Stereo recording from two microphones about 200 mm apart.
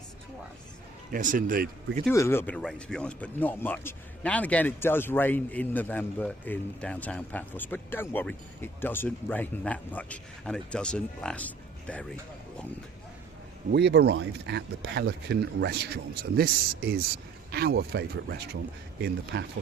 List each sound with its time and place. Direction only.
1.1 s speech: 45° right (ahead or behind)
2.1 s speech: 15° left (ahead or behind)
13.7 s speech: 60° right (ahead or behind)